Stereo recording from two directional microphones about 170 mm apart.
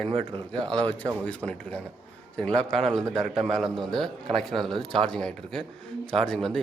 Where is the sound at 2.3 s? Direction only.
5° left (ahead or behind).